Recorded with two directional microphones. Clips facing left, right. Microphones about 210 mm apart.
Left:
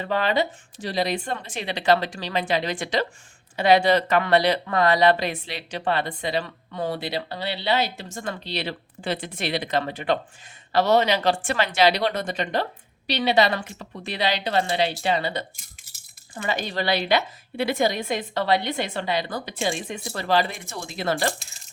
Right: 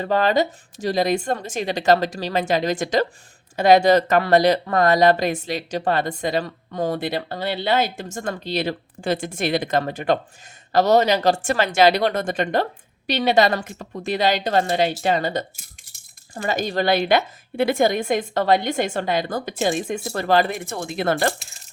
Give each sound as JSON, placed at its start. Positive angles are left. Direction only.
{"t": 0.0, "sound": "speech", "side_deg": -40}